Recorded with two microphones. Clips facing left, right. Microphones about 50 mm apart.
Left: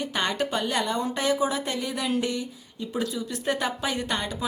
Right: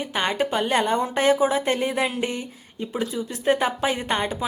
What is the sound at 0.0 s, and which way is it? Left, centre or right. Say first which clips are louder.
A woman's voice: right 3 dB; centre.